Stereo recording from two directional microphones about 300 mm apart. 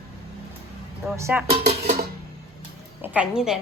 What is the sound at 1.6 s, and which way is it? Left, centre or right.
Music, right.